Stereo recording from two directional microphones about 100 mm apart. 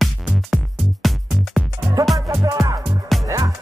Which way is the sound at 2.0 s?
35° right (ahead or behind).